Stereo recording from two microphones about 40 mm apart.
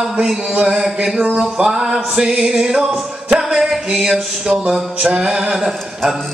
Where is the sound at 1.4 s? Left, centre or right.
Centre.